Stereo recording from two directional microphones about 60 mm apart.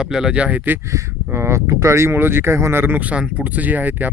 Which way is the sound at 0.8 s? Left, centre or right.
Right.